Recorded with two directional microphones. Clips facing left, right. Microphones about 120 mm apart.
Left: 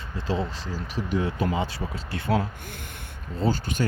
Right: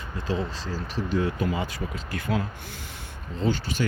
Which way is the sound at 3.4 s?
45° left (ahead or behind).